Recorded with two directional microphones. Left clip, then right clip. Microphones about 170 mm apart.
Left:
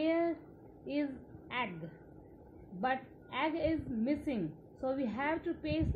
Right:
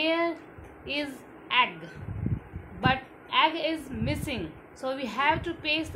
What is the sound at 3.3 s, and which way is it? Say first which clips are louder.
A woman's voice: right 9 dB; 45° left (ahead or behind).